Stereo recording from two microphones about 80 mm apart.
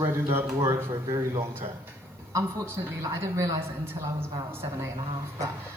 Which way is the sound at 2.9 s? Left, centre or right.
Right.